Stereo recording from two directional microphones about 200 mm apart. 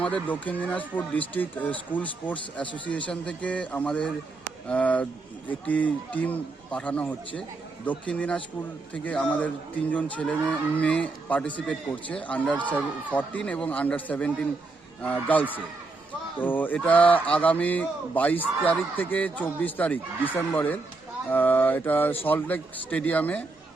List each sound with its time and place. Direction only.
0.0 s speech: 5° left (ahead or behind)